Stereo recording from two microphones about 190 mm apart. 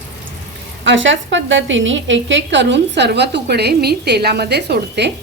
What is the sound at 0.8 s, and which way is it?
A woman's voice, 75° right (ahead or behind).